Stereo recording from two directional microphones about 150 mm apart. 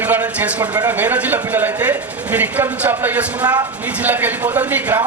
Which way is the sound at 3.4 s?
25° right (ahead or behind).